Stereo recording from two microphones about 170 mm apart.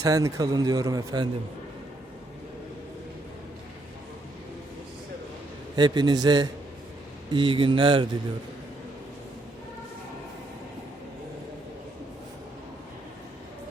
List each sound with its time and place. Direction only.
0.0 s a man's voice: 20° right (ahead or behind)
5.7 s a man's voice: 25° right (ahead or behind)